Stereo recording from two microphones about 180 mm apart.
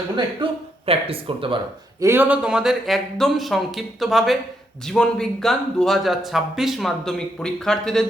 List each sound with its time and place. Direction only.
0.4 s speech: 25° right (ahead or behind)
2.0 s speech: 15° right (ahead or behind); by 8.0 s 5° left (ahead or behind)